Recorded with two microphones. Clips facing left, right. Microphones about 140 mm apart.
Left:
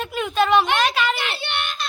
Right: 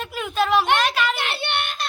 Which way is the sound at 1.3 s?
60° right (ahead or behind).